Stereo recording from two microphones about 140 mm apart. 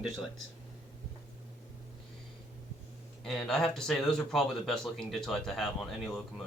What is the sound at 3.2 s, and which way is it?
Speech, 5° left (ahead or behind).